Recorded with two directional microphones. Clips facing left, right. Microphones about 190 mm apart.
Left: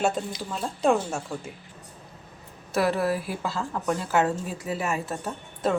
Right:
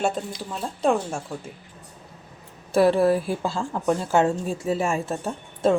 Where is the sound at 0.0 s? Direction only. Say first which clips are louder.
Even; centre (ahead or behind).